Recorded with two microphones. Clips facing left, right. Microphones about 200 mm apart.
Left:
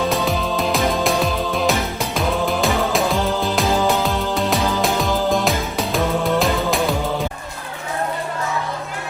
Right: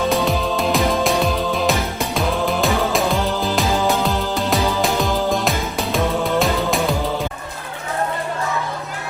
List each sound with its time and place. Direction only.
0.1 s music: centre (ahead or behind)